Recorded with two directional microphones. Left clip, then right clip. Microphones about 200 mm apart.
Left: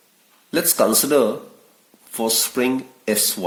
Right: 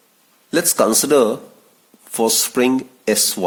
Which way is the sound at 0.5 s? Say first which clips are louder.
Right 2 dB; 45° right (ahead or behind).